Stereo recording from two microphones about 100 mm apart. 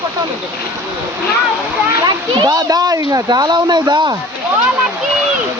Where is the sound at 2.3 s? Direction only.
45° right (ahead or behind).